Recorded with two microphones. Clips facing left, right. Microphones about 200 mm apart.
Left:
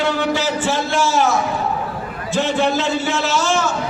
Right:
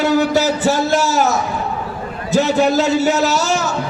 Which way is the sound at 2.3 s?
40° right (ahead or behind).